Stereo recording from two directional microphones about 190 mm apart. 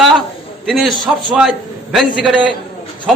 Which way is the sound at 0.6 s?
Centre (ahead or behind).